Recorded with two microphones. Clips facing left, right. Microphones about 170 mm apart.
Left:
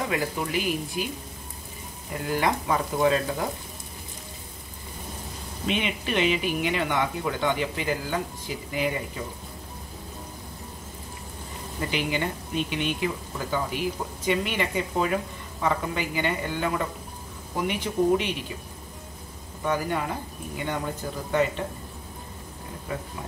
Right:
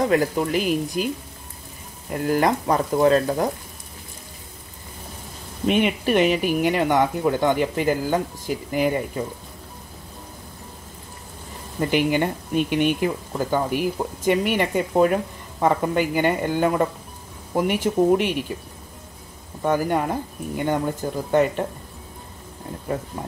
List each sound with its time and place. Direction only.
0.1 s speech: 40° right (ahead or behind)
2.2 s speech: 45° right (ahead or behind)
5.7 s speech: 50° right (ahead or behind)
11.9 s speech: 50° right (ahead or behind)
19.6 s speech: 45° right (ahead or behind)